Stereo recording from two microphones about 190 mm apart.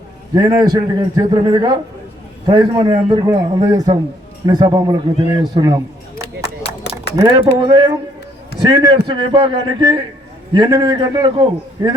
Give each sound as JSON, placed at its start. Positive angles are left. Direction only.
{"t": 0.3, "sound": "a man's voice", "side_deg": -20}
{"t": 6.2, "sound": "a sound", "side_deg": 60}
{"t": 7.2, "sound": "a man's voice", "side_deg": -20}